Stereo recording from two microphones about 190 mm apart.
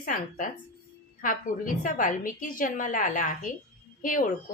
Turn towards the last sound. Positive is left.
turn(degrees=45)  # may be behind; listen again after turning